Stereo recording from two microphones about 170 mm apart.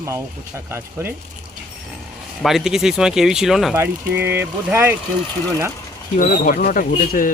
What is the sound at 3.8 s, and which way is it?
Speech, 15° right (ahead or behind).